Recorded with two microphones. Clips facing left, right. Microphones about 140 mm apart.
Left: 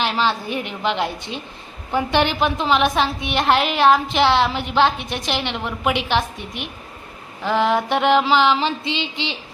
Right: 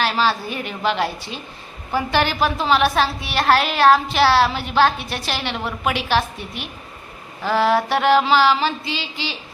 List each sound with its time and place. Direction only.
0.0 s a woman's voice: 20° left (ahead or behind)